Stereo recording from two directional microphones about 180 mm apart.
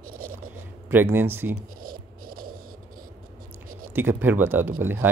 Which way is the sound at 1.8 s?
55° right (ahead or behind).